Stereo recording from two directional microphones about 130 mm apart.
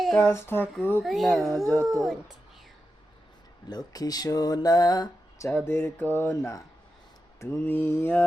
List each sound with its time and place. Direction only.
0.0 s a sound: 5° left (ahead or behind)
0.3 s speech: 20° left (ahead or behind)
1.0 s speech: centre (ahead or behind)
1.6 s speech: 25° right (ahead or behind)
3.7 s speech: 30° left (ahead or behind)
5.5 s speech: 15° left (ahead or behind)